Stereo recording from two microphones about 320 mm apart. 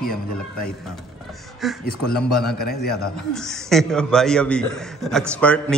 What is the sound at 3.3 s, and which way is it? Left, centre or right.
A man's voice, centre.